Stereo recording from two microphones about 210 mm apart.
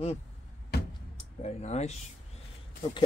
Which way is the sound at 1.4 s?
30° left (ahead or behind).